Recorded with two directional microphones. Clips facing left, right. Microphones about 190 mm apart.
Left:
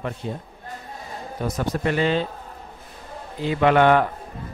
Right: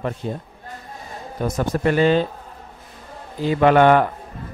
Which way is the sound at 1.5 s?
45° right (ahead or behind).